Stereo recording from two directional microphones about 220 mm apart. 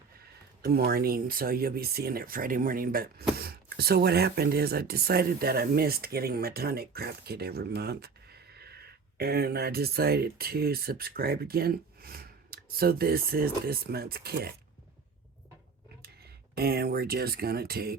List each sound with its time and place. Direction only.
0.6 s speech: 45° right (ahead or behind)
16.6 s speech: 45° right (ahead or behind)